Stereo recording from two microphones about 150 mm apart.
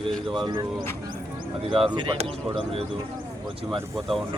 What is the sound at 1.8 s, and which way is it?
Speech, 35° right (ahead or behind).